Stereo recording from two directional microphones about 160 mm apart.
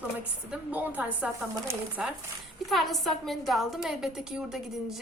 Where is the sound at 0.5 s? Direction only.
10° right (ahead or behind).